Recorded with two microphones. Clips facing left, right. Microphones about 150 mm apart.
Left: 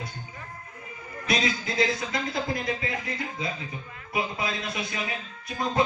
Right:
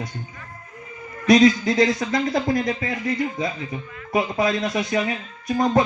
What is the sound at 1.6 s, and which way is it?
A woman's voice, 50° right (ahead or behind).